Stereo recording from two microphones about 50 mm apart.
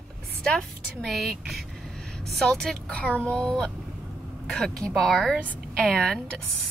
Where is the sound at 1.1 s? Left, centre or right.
Centre.